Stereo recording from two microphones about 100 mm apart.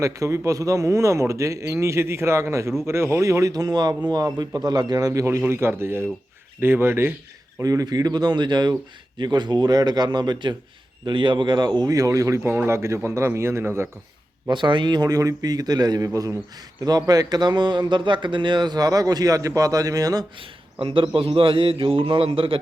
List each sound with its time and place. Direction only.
0.0 s speech: 30° right (ahead or behind)
5.5 s speech: 25° right (ahead or behind)
7.6 s a man's voice: 35° right (ahead or behind)
14.5 s a man's voice: 55° right (ahead or behind); by 20.2 s 35° right (ahead or behind)
20.8 s a man's voice: 60° right (ahead or behind)